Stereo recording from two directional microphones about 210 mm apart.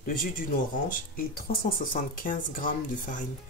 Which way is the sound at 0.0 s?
40° left (ahead or behind).